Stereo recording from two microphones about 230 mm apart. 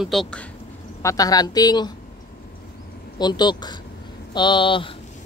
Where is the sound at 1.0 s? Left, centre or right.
Centre.